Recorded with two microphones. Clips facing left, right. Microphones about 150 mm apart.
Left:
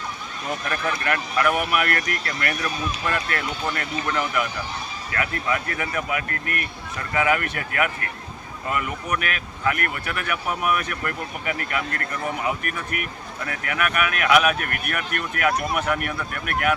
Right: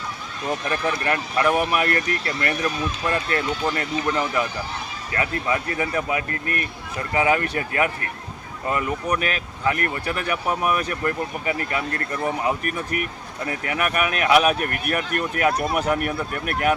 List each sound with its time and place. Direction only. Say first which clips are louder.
0.7 s speech: right 1 dB; 25° right (ahead or behind)